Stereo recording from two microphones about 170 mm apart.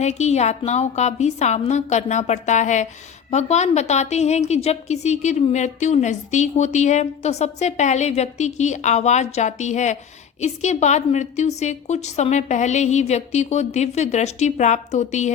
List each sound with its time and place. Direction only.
0.0 s a woman's voice: 40° left (ahead or behind)